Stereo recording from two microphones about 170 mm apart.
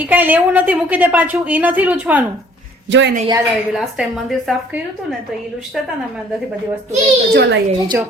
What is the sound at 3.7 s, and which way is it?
A woman's voice, centre (ahead or behind).